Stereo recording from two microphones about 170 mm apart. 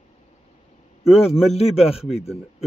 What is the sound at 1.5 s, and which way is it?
Speech, 35° left (ahead or behind).